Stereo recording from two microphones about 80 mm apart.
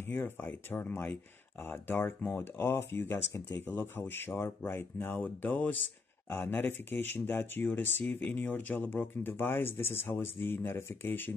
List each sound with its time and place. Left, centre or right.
0.1 s speech: left